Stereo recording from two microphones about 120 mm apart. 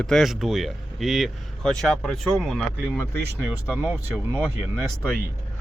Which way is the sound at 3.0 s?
20° left (ahead or behind).